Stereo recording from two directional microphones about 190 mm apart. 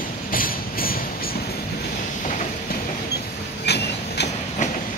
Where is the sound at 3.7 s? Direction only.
60° left (ahead or behind).